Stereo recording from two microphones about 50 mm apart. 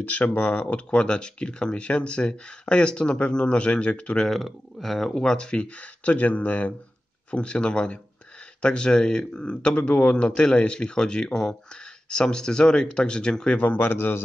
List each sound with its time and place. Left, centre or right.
0.0 s speech: left
4.3 s speech: centre
5.1 s speech: centre
13.6 s a man's voice: left